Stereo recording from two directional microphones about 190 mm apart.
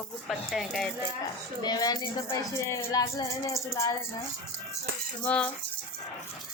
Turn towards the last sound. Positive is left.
turn(degrees=5)  # may be behind; listen again after turning